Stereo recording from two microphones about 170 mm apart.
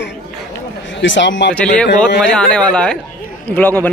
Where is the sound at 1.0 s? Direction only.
90° left.